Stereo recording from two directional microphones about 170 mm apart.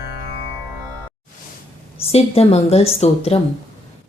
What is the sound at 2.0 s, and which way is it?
Mantra, 35° left (ahead or behind).